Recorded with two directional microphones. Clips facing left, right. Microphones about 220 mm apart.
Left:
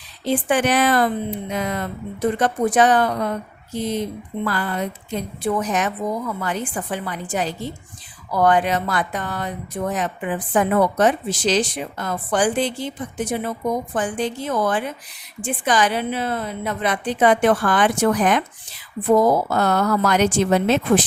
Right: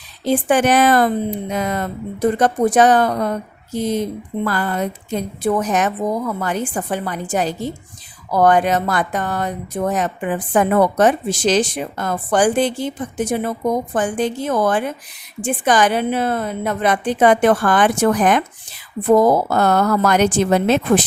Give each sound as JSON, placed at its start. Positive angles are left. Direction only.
{"t": 0.3, "sound": "speech", "side_deg": -45}
{"t": 19.5, "sound": "speech", "side_deg": -50}